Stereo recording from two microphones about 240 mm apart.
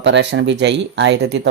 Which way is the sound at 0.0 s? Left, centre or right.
Right.